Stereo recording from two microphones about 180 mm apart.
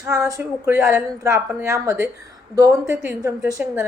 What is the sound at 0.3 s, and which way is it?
A woman's voice, 15° right (ahead or behind).